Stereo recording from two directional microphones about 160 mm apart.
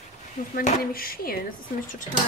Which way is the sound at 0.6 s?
65° left (ahead or behind).